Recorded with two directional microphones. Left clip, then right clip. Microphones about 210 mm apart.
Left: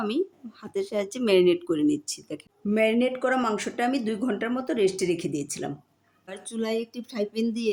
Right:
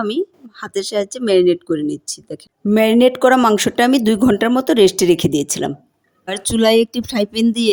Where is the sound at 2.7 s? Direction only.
45° right (ahead or behind).